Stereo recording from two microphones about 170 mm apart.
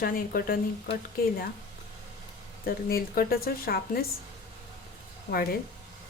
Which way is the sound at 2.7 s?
60° left (ahead or behind).